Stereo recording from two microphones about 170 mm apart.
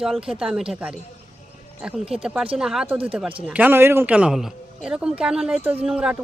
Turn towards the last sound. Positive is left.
turn(degrees=-5)  # may be behind; listen again after turning